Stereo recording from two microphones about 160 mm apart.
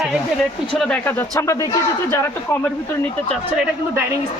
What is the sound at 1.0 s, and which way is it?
Speech, 15° left (ahead or behind).